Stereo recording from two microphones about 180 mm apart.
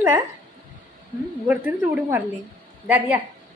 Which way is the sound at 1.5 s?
10° right (ahead or behind).